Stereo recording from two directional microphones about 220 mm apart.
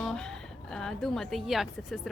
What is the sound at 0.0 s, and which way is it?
A woman's voice, 5° left (ahead or behind).